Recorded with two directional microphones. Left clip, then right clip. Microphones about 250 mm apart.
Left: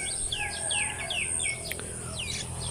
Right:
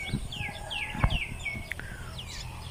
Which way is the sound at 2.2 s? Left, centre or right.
Left.